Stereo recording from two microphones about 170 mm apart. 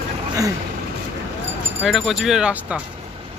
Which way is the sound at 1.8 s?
Centre (ahead or behind).